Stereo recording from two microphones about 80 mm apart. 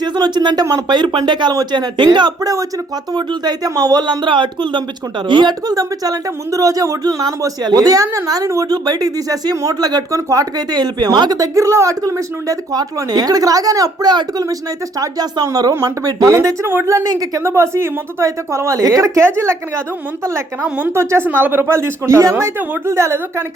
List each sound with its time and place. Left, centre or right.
0.0 s speech: right
8.7 s speech: right
10.7 s speech: right
14.1 s speech: right
14.9 s speech: right
20.6 s a woman's voice: centre
20.9 s speech: right